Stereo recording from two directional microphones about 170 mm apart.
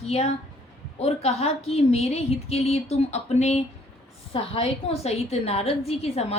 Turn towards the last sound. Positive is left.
turn(degrees=35)  # may be behind; listen again after turning